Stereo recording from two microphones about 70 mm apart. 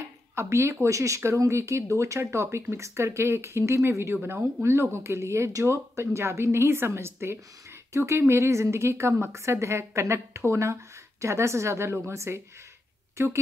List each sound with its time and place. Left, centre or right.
0.4 s speech: right
4.2 s speech: right
4.6 s speech: right